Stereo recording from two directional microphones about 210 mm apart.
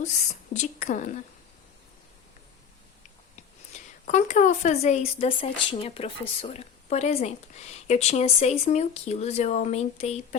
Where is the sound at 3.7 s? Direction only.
35° left (ahead or behind).